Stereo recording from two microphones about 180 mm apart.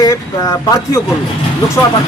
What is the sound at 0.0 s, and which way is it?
Speech, 20° left (ahead or behind).